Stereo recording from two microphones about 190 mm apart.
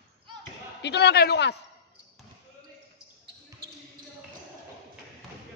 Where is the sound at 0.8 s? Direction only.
60° left (ahead or behind).